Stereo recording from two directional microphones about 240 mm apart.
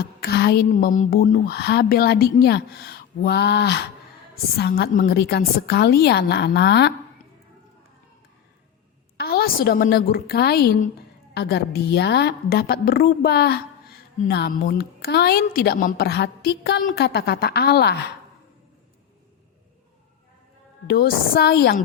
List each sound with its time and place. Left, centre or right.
0.0 s a woman's voice: left
9.1 s a woman's voice: left
20.8 s a woman's voice: left